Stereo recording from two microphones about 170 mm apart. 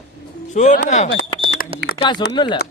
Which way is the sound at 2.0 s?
30° left (ahead or behind).